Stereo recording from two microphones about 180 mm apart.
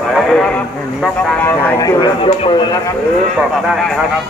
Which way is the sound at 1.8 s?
25° left (ahead or behind).